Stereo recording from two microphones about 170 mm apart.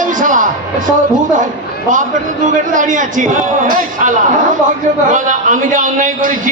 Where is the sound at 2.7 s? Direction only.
50° right (ahead or behind).